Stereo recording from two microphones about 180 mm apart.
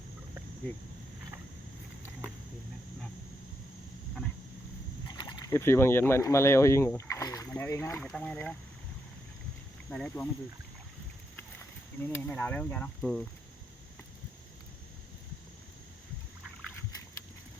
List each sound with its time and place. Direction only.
5.0 s speech: 25° left (ahead or behind); by 8.5 s 5° left (ahead or behind)
9.9 s speech: 5° left (ahead or behind)
12.0 s speech: 10° left (ahead or behind)